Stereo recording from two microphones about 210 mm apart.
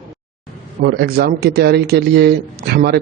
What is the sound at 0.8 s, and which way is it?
Speech, 45° right (ahead or behind).